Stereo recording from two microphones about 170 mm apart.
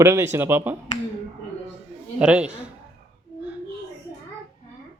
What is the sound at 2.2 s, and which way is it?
Speech, 5° right (ahead or behind).